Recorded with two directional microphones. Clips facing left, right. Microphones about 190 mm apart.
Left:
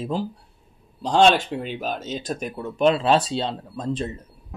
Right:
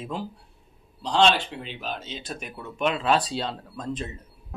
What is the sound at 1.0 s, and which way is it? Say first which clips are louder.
Speech: left 4 dB; 45° left (ahead or behind).